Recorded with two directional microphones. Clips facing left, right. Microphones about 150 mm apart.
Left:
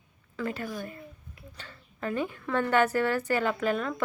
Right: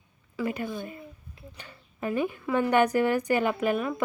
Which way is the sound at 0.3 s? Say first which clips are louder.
Right 3 dB; 15° right (ahead or behind).